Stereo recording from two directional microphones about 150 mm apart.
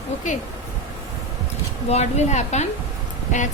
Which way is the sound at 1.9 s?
45° left (ahead or behind).